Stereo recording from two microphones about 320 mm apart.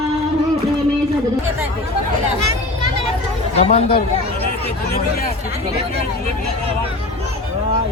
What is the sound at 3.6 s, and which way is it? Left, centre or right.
Speech, centre.